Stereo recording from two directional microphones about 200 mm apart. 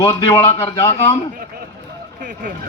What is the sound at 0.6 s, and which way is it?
Speech, 15° left (ahead or behind).